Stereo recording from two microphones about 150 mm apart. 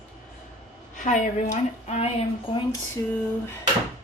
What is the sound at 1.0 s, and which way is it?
A woman's voice, 55° left (ahead or behind).